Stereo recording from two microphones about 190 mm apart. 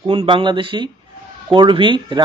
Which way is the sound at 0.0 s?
25° right (ahead or behind).